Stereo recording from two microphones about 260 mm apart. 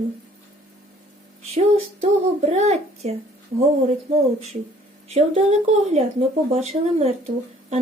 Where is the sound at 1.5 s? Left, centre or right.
Right.